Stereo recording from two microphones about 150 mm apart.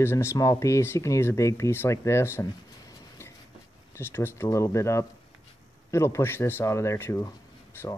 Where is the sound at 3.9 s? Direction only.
15° left (ahead or behind).